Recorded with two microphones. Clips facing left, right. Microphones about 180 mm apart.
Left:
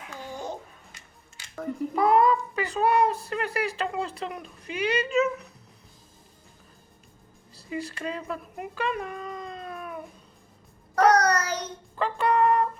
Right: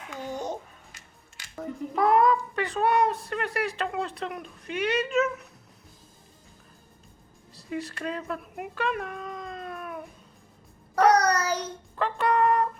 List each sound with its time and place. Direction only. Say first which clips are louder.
0.1 s babbling: right 3 dB; 20° right (ahead or behind)
2.0 s speech: even; centre (ahead or behind)
7.5 s speech: even; centre (ahead or behind)
10.9 s child singing: even; 5° right (ahead or behind)
11.9 s a sound: left 1 dB; centre (ahead or behind)